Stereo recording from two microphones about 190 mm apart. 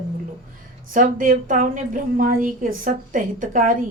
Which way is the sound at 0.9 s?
45° right (ahead or behind).